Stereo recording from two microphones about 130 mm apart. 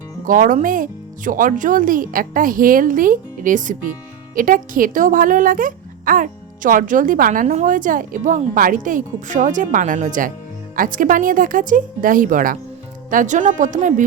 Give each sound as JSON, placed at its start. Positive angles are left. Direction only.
{"t": 0.3, "sound": "a woman's voice", "side_deg": -90}
{"t": 13.1, "sound": "speech", "side_deg": -80}